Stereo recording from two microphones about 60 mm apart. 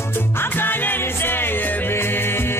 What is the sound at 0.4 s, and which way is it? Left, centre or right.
Music, left.